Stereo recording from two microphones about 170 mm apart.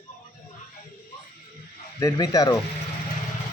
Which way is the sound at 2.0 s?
20° left (ahead or behind).